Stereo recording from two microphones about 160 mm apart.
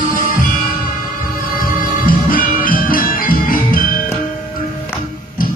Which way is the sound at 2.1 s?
60° left (ahead or behind).